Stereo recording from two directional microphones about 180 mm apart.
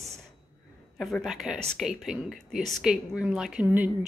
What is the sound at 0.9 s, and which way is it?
Speech, centre (ahead or behind).